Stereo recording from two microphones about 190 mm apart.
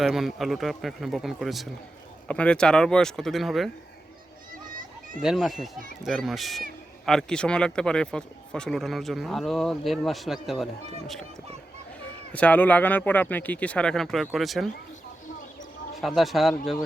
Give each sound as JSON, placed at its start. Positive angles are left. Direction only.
{"t": 0.0, "sound": "speech", "side_deg": 0}
{"t": 4.6, "sound": "children playing", "side_deg": -45}
{"t": 5.2, "sound": "speech", "side_deg": 0}
{"t": 12.3, "sound": "speech", "side_deg": 5}
{"t": 16.0, "sound": "speech", "side_deg": 0}